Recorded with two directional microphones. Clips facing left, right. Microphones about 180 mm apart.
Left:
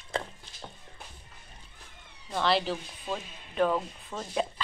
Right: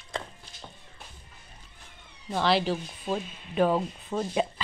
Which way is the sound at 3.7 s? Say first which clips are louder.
Right 3 dB; 25° right (ahead or behind).